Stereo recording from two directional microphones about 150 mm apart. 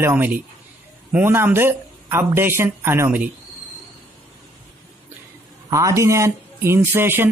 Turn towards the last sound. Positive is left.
turn(degrees=-15)  # may be behind; listen again after turning